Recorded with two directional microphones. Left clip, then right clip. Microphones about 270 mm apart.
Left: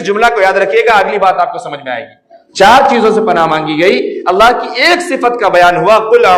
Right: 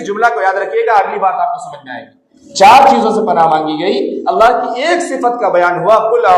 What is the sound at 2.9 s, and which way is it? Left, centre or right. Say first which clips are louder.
A man's voice: left 2 dB; left.